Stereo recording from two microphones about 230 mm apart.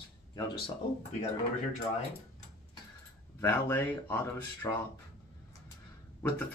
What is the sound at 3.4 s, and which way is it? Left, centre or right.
Speech, centre.